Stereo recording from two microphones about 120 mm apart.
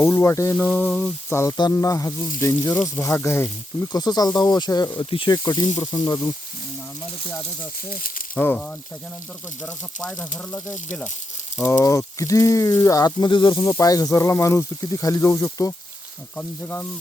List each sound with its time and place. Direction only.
0.0 s speech: 25° left (ahead or behind)
0.5 s a sound: 15° left (ahead or behind)
1.5 s speech: 30° left (ahead or behind)
3.9 s speech: 35° left (ahead or behind)
8.4 s a sound: 15° left (ahead or behind)
10.2 s speech: 25° left (ahead or behind)